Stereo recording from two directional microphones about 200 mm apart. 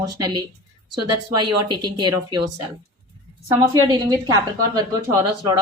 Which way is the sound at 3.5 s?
15° right (ahead or behind).